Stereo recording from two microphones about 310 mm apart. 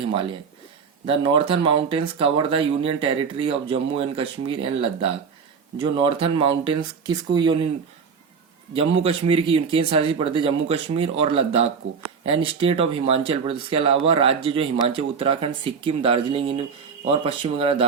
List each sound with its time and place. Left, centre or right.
0.1 s speech: centre
9.0 s speech: centre